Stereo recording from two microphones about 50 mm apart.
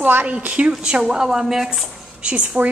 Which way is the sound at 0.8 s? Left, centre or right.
Centre.